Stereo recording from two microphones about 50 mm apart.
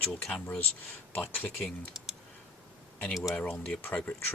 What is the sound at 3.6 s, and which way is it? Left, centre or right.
Speech, left.